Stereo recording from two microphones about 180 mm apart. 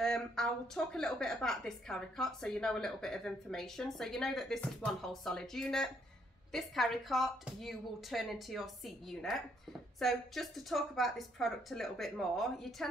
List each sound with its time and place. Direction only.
0.0 s a woman's voice: 5° left (ahead or behind)